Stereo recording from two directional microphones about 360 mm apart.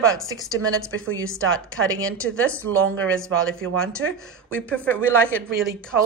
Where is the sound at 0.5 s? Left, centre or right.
Right.